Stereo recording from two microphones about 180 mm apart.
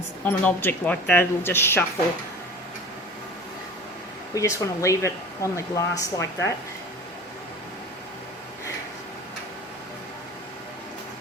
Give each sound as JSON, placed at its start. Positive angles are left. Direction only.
{"t": 0.3, "sound": "speech", "side_deg": 10}
{"t": 4.4, "sound": "speech", "side_deg": 15}